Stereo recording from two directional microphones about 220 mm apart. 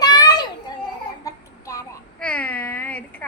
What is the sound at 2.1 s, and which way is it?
Speech, 5° left (ahead or behind).